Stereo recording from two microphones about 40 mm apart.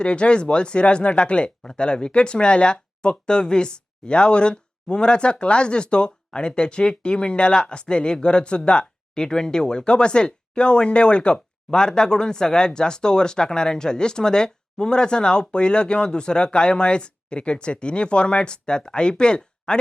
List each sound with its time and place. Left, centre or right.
0.0 s speech: left